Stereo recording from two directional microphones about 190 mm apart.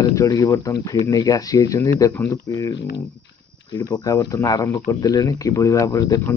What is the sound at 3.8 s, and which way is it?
Speech, 20° left (ahead or behind).